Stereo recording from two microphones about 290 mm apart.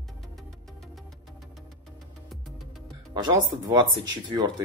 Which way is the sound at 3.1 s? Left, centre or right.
Centre.